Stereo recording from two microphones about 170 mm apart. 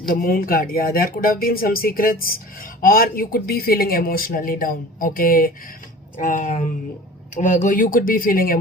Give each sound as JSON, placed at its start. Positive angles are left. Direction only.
{"t": 0.1, "sound": "speech", "side_deg": 60}